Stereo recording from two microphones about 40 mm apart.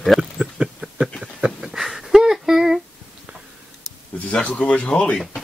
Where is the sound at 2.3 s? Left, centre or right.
Centre.